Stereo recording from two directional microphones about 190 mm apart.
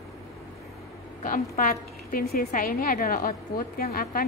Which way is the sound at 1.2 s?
45° left (ahead or behind).